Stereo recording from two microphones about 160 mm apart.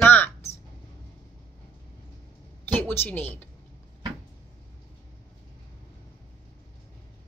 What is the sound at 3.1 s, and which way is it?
Speech, 10° left (ahead or behind).